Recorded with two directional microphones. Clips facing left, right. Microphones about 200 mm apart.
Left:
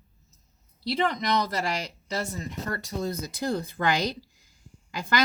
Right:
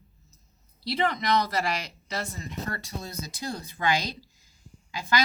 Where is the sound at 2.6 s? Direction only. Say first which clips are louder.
Left 6 dB; 50° left (ahead or behind).